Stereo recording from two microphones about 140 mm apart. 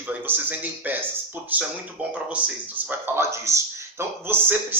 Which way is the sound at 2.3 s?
15° right (ahead or behind).